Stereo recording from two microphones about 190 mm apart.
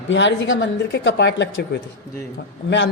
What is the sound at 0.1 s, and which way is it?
A woman's voice, 70° left (ahead or behind).